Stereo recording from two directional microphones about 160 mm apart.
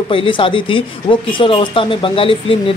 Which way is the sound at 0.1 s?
35° left (ahead or behind).